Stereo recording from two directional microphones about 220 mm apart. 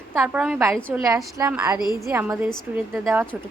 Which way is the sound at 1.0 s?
15° right (ahead or behind).